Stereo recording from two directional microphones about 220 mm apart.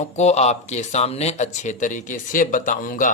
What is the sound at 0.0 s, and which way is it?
Speech, 30° left (ahead or behind).